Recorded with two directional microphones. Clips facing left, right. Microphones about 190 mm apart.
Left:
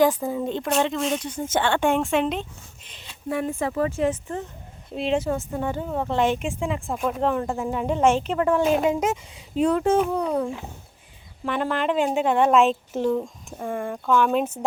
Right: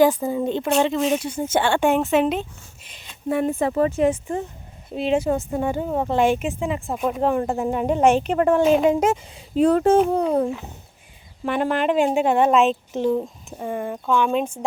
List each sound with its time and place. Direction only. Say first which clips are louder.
0.0 s speech: right 3 dB; centre (ahead or behind)
3.2 s speech: right 4 dB; 30° right (ahead or behind)
4.9 s speech: right 3 dB; 5° right (ahead or behind)
5.3 s speech: right 4 dB; 15° right (ahead or behind)
7.3 s a child's voice: right 4 dB; 35° right (ahead or behind)
8.0 s speech: right 2 dB; 15° right (ahead or behind)
8.3 s a woman's voice: right 4 dB; 50° right (ahead or behind)
9.6 s a child's voice: right 4 dB; 35° right (ahead or behind)
11.4 s speech: right 3 dB; 15° right (ahead or behind)
12.4 s speech: left 2 dB; centre (ahead or behind)